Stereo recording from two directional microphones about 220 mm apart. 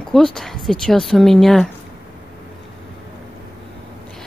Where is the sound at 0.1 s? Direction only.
Centre (ahead or behind).